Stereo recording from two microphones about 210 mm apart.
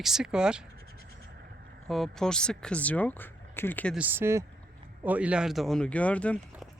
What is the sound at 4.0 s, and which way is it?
Speech, 10° right (ahead or behind).